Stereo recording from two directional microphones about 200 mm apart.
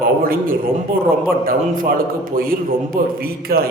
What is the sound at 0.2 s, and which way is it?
Speech, 45° right (ahead or behind).